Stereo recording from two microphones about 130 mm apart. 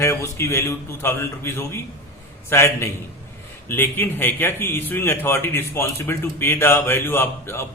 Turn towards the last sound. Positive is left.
turn(degrees=20)  # may be behind; listen again after turning